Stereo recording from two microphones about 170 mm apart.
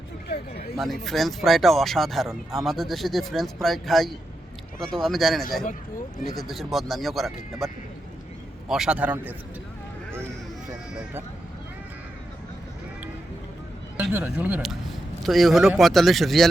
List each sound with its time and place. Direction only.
0.3 s speech: 65° left (ahead or behind)
0.8 s speech: centre (ahead or behind)
8.7 s a man's voice: 5° right (ahead or behind)
13.9 s a man's voice: 10° right (ahead or behind)